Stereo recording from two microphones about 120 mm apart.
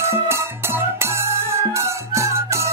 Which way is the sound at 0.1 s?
20° right (ahead or behind).